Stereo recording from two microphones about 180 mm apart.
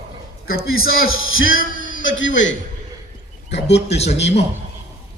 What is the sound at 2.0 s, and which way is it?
Speech, 90° left.